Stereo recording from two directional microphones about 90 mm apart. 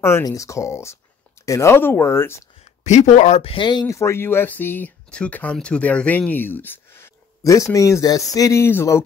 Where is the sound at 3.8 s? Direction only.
35° left (ahead or behind).